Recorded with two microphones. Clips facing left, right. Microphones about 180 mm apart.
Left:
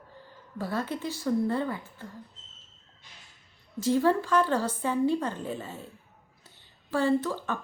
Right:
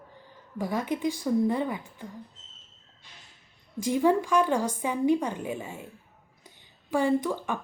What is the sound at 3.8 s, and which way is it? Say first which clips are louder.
A woman's voice: right 1 dB; 15° right (ahead or behind).